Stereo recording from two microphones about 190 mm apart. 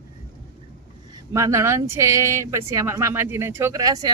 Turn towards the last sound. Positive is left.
turn(degrees=-20)  # may be behind; listen again after turning